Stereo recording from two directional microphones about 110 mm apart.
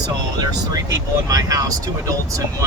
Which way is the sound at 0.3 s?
35° right (ahead or behind).